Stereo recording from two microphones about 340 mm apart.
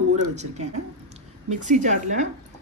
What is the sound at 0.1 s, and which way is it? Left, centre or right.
Speech, centre.